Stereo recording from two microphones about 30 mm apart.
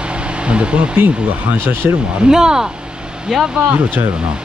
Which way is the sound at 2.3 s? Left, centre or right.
Right.